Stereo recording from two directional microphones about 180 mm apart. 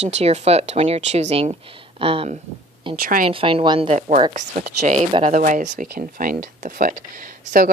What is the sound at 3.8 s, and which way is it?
Speech, 45° right (ahead or behind).